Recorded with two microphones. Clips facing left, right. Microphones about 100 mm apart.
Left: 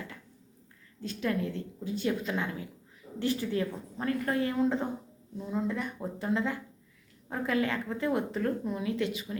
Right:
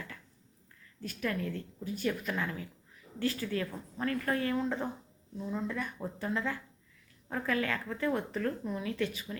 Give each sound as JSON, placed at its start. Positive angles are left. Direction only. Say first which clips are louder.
{"t": 1.0, "sound": "speech", "louder": "left 3 dB", "side_deg": 25}